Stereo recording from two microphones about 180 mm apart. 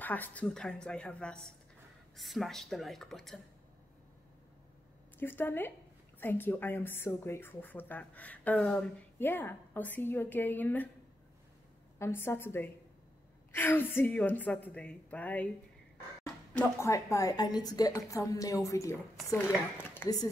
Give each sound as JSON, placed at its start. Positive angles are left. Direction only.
{"t": 0.0, "sound": "a woman's voice", "side_deg": 10}
{"t": 5.2, "sound": "speech", "side_deg": 10}
{"t": 12.0, "sound": "speech", "side_deg": 15}
{"t": 16.8, "sound": "a woman's voice", "side_deg": 15}